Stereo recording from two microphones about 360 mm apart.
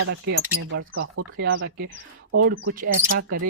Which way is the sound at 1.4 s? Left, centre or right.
Right.